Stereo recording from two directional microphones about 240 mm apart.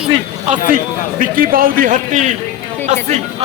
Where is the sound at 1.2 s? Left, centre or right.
Right.